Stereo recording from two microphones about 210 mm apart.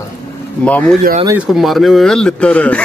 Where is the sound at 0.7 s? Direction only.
5° left (ahead or behind).